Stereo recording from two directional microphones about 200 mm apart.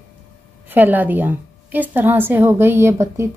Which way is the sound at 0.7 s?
10° right (ahead or behind).